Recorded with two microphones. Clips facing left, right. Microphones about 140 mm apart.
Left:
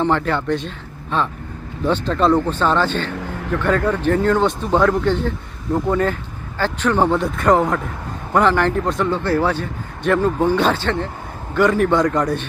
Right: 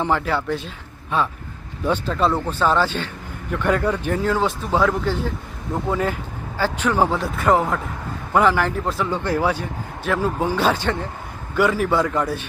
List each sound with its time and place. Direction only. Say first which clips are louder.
0.0 s a man's voice: left 3 dB; 10° right (ahead or behind)
3.2 s a sound: left 7 dB; 90° left
3.5 s a man's voice: left 2 dB; 15° right (ahead or behind)